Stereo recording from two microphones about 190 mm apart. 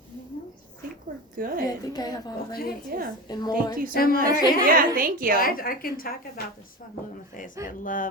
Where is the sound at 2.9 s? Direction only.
50° right (ahead or behind).